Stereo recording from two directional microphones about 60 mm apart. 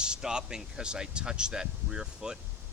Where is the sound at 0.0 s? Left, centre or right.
Centre.